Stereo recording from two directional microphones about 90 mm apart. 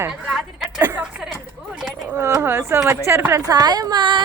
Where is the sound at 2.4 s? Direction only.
25° right (ahead or behind).